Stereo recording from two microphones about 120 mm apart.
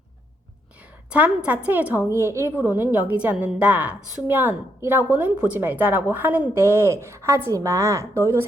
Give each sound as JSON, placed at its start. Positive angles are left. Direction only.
{"t": 1.1, "sound": "a woman's voice", "side_deg": -10}